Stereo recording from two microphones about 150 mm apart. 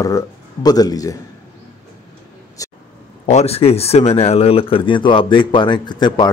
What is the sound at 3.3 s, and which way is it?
Speech, 45° left (ahead or behind).